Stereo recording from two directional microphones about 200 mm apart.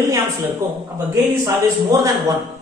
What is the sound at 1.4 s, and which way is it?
Speech, 15° right (ahead or behind).